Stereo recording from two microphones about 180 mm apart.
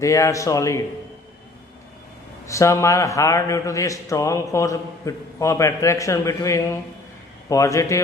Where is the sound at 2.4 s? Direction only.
15° left (ahead or behind).